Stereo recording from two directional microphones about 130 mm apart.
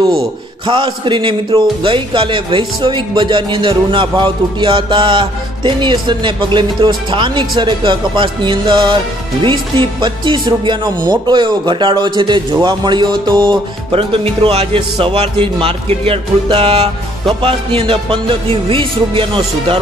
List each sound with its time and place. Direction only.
0.7 s a man's voice: 40° right (ahead or behind)